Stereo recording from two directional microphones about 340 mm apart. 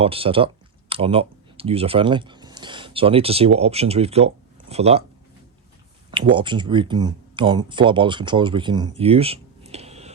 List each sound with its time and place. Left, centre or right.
0.0 s speech: centre
6.1 s speech: centre